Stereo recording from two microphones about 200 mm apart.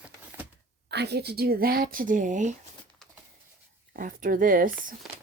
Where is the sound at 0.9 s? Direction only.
55° right (ahead or behind); by 2.5 s 40° right (ahead or behind).